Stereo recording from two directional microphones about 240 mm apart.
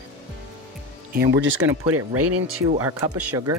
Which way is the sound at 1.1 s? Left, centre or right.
Right.